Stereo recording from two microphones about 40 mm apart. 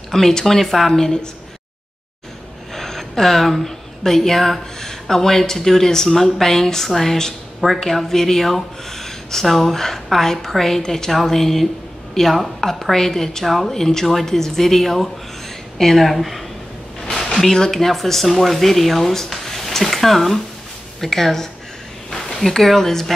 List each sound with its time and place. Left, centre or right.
0.1 s a woman's voice: centre
2.7 s a woman's voice: centre